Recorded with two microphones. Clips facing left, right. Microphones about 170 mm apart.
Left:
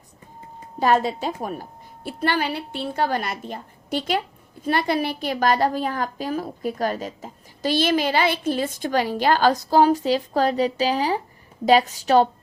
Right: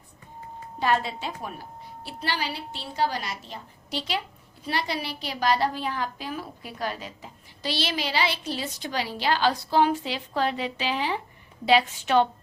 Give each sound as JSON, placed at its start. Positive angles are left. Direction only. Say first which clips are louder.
{"t": 0.8, "sound": "a woman's voice", "louder": "left 6 dB", "side_deg": 40}